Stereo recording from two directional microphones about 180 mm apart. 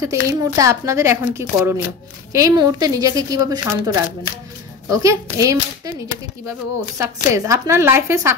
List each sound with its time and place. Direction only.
0.0 s a woman's voice: 20° right (ahead or behind)
7.0 s a woman's voice: 15° right (ahead or behind)